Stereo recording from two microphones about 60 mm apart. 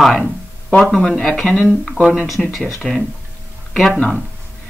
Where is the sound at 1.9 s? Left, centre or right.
Centre.